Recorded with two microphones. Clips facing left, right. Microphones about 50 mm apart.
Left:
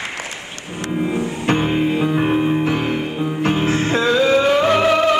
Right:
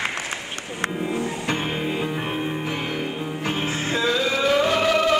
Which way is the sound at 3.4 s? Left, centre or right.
Left.